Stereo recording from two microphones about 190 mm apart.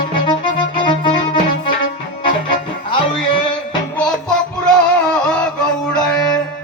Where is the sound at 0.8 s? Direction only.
25° left (ahead or behind).